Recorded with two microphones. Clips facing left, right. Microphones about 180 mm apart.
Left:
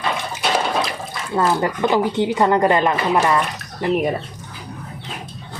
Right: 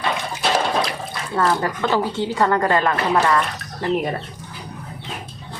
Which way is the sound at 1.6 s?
15° left (ahead or behind).